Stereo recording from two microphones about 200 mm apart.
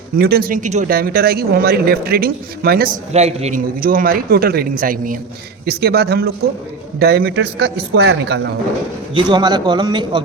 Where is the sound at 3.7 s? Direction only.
45° right (ahead or behind).